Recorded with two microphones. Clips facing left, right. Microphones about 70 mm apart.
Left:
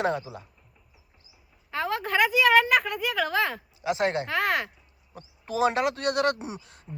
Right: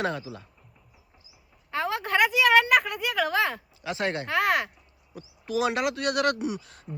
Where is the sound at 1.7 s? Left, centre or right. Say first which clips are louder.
Even; centre.